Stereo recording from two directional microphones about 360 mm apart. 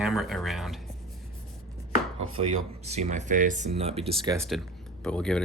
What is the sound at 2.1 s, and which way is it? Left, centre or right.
Chopping, right.